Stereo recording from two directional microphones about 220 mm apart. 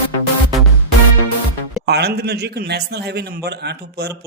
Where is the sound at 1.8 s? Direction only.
50° right (ahead or behind).